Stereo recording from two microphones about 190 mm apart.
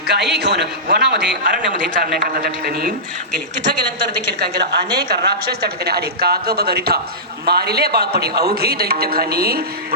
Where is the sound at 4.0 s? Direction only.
60° right (ahead or behind).